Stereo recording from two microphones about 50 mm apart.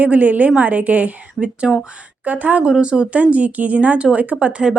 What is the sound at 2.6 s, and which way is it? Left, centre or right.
A woman's voice, centre.